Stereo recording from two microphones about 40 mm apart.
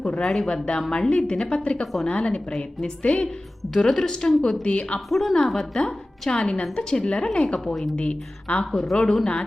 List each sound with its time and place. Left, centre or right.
0.2 s a woman's voice: centre
0.4 s a woman's voice: left
3.8 s a woman's voice: centre
4.6 s a woman's voice: left
4.9 s a woman's voice: centre
5.7 s a woman's voice: centre
8.7 s a woman's voice: centre
9.0 s a woman's voice: left